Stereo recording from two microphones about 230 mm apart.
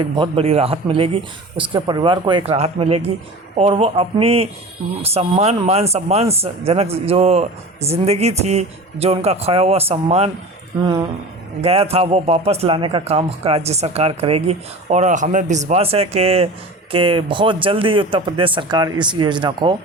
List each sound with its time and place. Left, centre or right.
0.0 s speech: right
11.6 s speech: right